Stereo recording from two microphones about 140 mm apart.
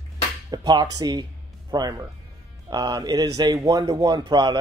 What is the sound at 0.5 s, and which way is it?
Speech, 30° right (ahead or behind).